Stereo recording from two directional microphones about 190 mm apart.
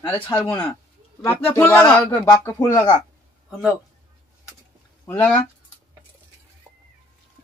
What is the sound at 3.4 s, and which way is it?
Speech, centre (ahead or behind).